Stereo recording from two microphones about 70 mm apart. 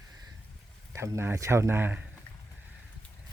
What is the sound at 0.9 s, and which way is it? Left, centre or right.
Speech, right.